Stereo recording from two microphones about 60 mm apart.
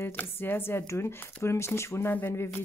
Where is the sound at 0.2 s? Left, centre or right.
Left.